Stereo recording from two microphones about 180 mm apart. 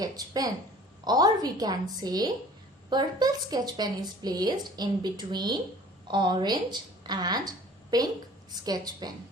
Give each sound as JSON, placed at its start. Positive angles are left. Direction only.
{"t": 0.0, "sound": "a woman's voice", "side_deg": -20}